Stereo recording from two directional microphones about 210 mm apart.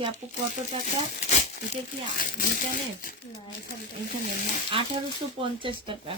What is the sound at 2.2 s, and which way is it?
Speech, 40° left (ahead or behind).